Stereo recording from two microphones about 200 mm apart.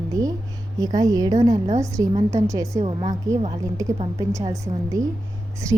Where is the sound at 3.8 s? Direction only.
15° right (ahead or behind).